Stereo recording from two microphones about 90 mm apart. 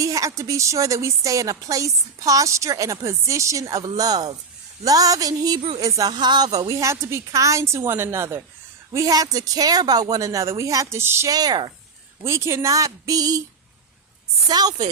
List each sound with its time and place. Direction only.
0.0 s a woman's voice: 40° right (ahead or behind)
6.0 s a woman's voice: 55° right (ahead or behind); by 11.3 s 30° right (ahead or behind)
11.3 s a woman's voice: 45° right (ahead or behind)
12.2 s a woman's voice: 30° right (ahead or behind)
14.4 s a woman's voice: 50° right (ahead or behind)